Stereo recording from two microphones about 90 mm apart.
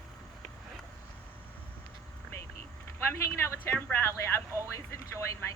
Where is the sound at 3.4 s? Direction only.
30° left (ahead or behind).